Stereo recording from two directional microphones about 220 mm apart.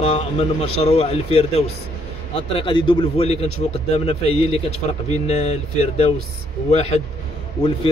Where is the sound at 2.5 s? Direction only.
25° left (ahead or behind).